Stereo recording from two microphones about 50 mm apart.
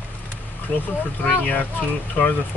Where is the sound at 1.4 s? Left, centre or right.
Left.